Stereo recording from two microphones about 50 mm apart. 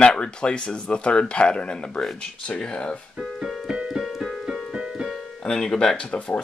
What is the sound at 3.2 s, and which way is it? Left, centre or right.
Keyboard, centre.